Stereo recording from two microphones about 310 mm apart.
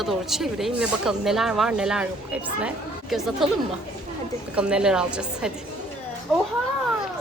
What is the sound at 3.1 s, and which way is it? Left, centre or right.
Speech, centre.